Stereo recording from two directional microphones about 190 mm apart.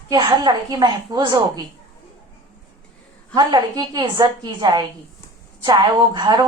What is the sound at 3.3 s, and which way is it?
A woman's voice, 20° right (ahead or behind).